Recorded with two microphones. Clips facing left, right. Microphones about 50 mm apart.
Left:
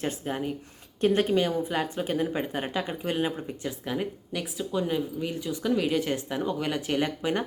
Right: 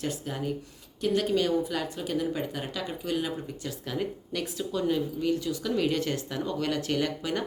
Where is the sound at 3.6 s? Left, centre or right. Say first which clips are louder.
Left 2 dB; centre.